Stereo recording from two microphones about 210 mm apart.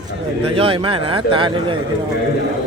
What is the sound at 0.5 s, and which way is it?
A man's voice, 25° right (ahead or behind).